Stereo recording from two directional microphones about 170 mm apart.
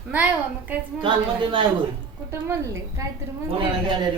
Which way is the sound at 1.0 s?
30° right (ahead or behind).